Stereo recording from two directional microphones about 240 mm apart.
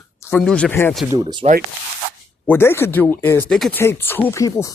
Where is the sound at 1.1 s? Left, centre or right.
Centre.